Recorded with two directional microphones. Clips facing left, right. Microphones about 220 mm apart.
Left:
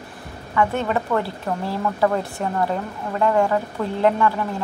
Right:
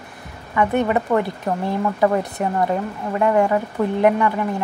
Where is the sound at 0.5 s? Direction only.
15° right (ahead or behind).